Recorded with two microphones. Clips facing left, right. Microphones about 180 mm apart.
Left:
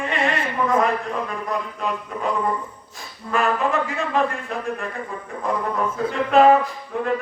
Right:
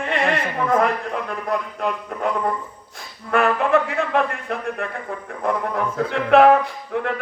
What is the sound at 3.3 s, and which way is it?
A man's voice, 60° right (ahead or behind).